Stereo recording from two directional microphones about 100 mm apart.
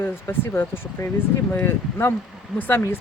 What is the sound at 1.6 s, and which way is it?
Speech, 25° left (ahead or behind).